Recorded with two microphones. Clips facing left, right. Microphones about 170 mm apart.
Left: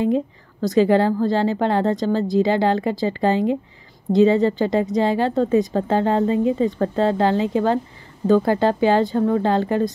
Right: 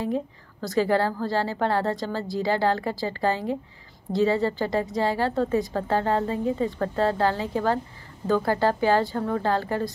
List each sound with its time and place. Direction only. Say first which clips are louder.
0.0 s speech: left 7 dB; 20° left (ahead or behind)